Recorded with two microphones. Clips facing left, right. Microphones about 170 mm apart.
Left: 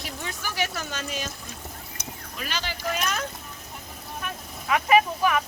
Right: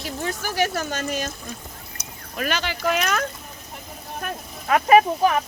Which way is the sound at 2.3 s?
55° right (ahead or behind).